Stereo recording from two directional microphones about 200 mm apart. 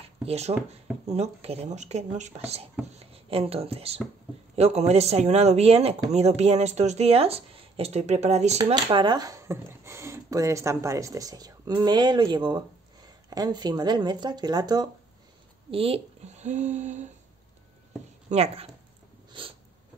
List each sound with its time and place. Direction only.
0.0 s speech: 30° right (ahead or behind)
8.6 s speech: 25° right (ahead or behind)
18.3 s speech: 30° right (ahead or behind)